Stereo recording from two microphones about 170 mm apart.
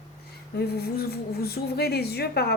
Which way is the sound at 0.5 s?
65° left (ahead or behind).